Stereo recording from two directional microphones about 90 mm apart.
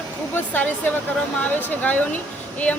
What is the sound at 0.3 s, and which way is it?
Speech, 20° left (ahead or behind).